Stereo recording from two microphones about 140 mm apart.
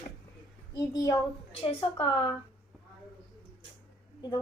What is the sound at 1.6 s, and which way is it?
Speech, 40° left (ahead or behind).